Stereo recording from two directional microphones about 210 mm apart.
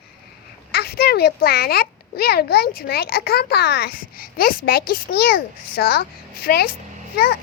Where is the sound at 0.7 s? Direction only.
50° left (ahead or behind).